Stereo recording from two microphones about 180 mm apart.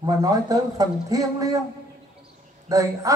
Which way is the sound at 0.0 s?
20° right (ahead or behind).